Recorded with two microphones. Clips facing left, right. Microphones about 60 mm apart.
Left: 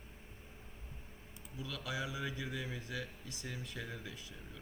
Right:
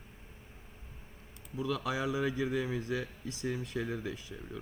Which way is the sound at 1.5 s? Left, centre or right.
Right.